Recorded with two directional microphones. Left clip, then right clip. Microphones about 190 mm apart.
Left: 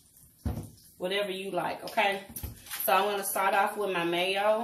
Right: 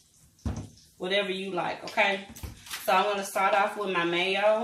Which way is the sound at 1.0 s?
5° right (ahead or behind).